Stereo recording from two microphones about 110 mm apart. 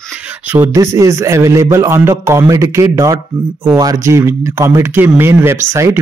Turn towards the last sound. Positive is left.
turn(degrees=-25)  # may be behind; listen again after turning